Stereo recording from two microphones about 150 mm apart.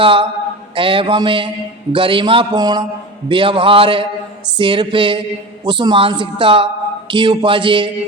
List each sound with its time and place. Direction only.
0.0 s speech: 35° right (ahead or behind)